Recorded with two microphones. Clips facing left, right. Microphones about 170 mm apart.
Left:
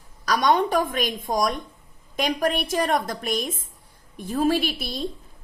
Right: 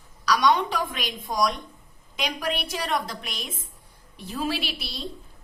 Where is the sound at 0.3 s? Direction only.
50° left (ahead or behind).